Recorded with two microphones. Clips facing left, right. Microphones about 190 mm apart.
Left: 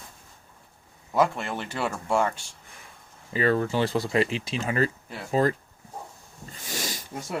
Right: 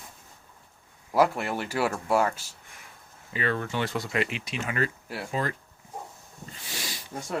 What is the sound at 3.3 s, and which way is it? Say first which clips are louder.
Speech: left 5 dB; 35° left (ahead or behind).